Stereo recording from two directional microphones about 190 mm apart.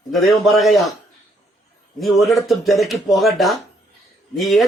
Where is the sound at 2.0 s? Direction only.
Centre (ahead or behind).